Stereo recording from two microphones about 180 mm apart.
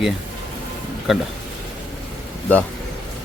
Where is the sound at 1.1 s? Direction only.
Centre (ahead or behind).